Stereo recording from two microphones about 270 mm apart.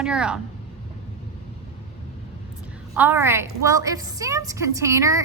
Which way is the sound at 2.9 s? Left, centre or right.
Centre.